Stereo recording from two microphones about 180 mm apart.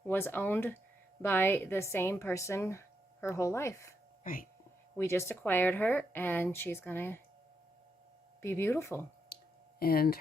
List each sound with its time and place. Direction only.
0.1 s a woman's voice: 10° left (ahead or behind)
4.2 s speech: 50° left (ahead or behind)
4.9 s a woman's voice: 15° left (ahead or behind)
8.4 s a woman's voice: 15° left (ahead or behind)
9.3 s a sound: 55° left (ahead or behind)